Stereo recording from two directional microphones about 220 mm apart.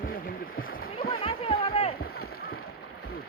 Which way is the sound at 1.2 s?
25° left (ahead or behind).